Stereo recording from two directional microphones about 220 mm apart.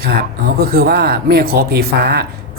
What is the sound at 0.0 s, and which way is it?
Speech, 45° right (ahead or behind).